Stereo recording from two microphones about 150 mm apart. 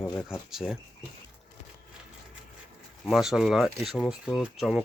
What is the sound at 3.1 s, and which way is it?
Speech, 5° right (ahead or behind).